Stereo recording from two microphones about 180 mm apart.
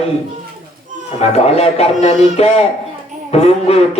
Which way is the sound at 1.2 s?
35° left (ahead or behind).